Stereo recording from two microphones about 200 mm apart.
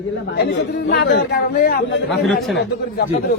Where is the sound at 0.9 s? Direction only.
55° left (ahead or behind).